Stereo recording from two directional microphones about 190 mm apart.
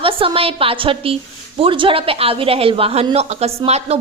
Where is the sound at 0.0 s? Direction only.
30° right (ahead or behind).